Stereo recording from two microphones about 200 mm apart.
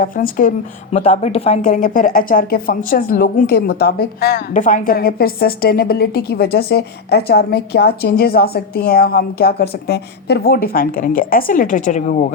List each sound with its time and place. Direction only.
0.0 s speech: 45° left (ahead or behind)
0.9 s speech: 30° left (ahead or behind)